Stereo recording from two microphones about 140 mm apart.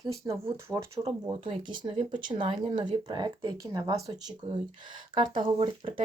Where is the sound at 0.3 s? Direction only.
25° right (ahead or behind).